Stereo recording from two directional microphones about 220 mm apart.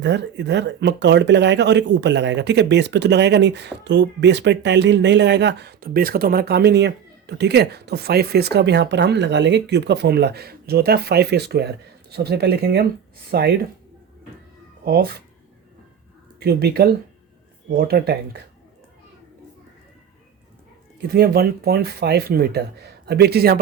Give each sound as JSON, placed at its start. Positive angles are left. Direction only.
{"t": 0.0, "sound": "speech", "side_deg": -50}
{"t": 14.8, "sound": "speech", "side_deg": -45}
{"t": 16.4, "sound": "speech", "side_deg": -45}
{"t": 21.1, "sound": "speech", "side_deg": -45}